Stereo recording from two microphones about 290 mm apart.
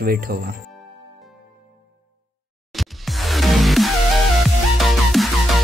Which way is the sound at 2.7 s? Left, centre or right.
Centre.